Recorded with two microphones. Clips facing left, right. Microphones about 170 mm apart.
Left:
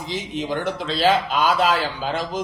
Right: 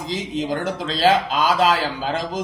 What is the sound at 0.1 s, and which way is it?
Speech, 90° right.